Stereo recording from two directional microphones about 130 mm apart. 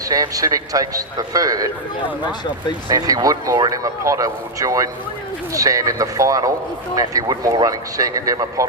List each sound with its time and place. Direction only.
0.1 s speech: 25° right (ahead or behind)
2.9 s speech: 25° right (ahead or behind)